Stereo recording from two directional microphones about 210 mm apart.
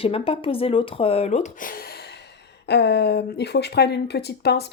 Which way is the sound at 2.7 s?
50° left (ahead or behind).